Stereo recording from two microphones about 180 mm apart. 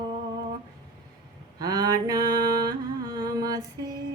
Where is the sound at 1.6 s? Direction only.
20° right (ahead or behind).